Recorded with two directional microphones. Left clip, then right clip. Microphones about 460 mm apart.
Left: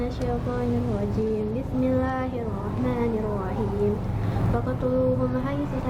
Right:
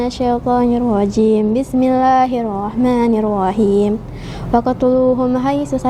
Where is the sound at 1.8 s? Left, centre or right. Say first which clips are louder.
Right 14 dB; right.